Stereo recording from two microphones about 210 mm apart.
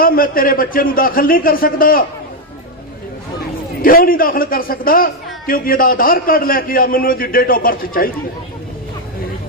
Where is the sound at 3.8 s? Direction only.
45° left (ahead or behind).